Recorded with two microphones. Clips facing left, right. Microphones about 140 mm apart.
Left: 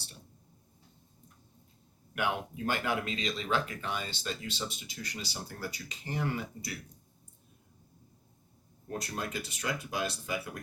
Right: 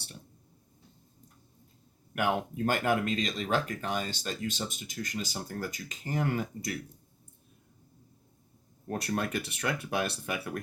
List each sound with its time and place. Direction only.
2.1 s speech: 45° right (ahead or behind)
8.9 s speech: 65° right (ahead or behind)